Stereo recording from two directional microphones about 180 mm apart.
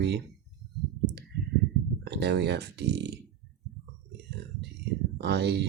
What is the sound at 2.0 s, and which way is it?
Speech, 70° right (ahead or behind).